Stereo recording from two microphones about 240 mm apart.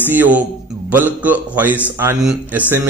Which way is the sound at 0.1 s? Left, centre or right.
Centre.